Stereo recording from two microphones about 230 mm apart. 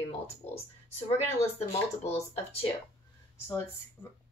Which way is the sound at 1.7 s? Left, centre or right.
Left.